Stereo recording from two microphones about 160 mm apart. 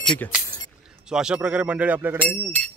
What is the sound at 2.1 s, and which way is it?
Speech, 5° left (ahead or behind).